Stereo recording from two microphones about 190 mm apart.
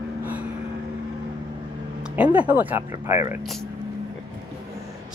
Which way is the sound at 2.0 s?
5° right (ahead or behind).